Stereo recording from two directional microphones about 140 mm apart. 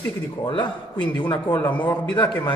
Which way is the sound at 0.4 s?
35° left (ahead or behind).